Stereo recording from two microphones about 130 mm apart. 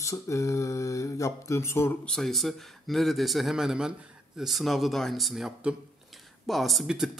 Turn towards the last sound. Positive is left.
turn(degrees=-5)  # may be behind; listen again after turning